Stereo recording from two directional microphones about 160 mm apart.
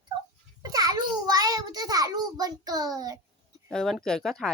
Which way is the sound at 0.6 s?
25° right (ahead or behind).